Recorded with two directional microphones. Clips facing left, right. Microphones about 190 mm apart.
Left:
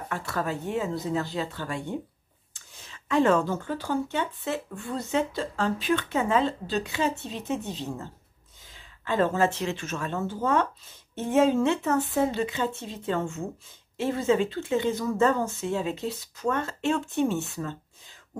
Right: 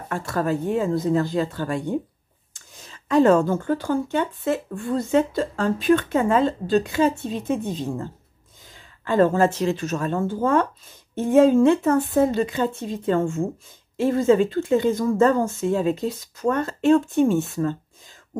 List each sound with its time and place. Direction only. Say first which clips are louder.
0.1 s speech: right 7 dB; 45° right (ahead or behind)